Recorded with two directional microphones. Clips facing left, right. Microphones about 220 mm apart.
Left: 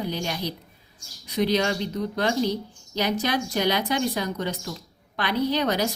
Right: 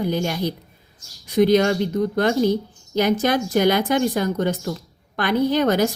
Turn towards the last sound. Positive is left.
turn(degrees=-50)  # may be behind; listen again after turning